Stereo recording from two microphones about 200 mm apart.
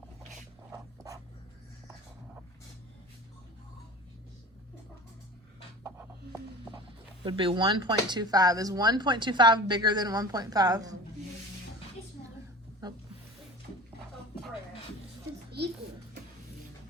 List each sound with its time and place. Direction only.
0.7 s dog: 15° right (ahead or behind)
5.8 s music: 15° right (ahead or behind)
7.3 s speech: 25° right (ahead or behind)